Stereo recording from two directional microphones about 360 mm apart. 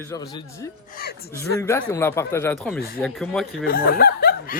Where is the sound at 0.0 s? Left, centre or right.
Centre.